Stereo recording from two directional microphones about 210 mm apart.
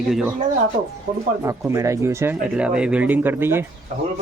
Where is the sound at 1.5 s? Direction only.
15° right (ahead or behind).